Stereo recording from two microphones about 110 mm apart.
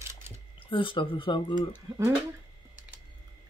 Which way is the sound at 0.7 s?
50° left (ahead or behind).